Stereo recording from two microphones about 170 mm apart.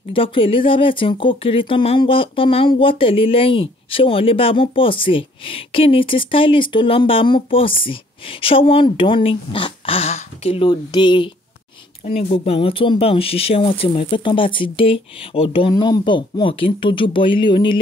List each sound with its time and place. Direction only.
0.1 s speech: 30° left (ahead or behind)
12.1 s speech: 45° left (ahead or behind)